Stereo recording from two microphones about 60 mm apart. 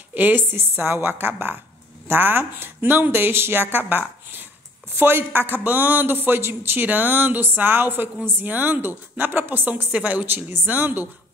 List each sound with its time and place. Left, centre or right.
0.1 s a woman's voice: right